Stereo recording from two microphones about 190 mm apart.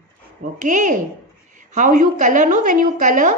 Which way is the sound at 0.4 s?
45° right (ahead or behind).